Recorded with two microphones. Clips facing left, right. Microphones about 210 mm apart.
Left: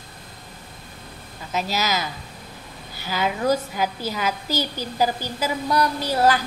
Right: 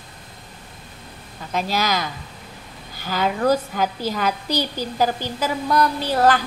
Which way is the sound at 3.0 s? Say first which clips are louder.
Right 3 dB; 45° right (ahead or behind).